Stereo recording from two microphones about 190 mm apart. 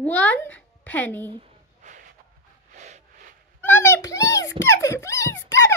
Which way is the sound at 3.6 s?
10° left (ahead or behind).